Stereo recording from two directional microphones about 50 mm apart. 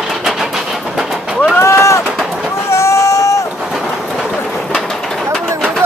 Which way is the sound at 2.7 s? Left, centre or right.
Left.